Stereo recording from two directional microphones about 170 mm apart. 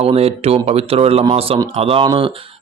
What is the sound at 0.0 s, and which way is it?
Speech, 35° right (ahead or behind).